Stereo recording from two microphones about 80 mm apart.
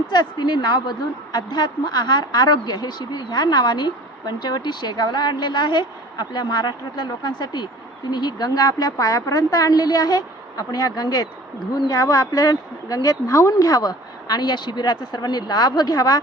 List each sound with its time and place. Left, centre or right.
0.1 s a woman's voice: left